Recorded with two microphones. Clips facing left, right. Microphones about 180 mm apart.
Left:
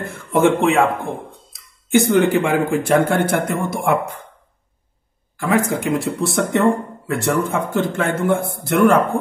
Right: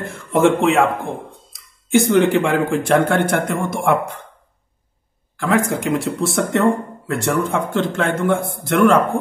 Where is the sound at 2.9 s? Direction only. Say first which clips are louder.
Even; 60° right (ahead or behind).